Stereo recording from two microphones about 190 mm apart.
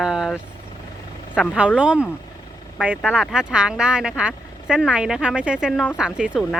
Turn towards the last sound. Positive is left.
turn(degrees=-5)  # may be behind; listen again after turning